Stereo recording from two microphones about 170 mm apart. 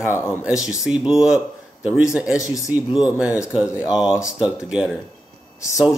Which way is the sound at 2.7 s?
5° right (ahead or behind).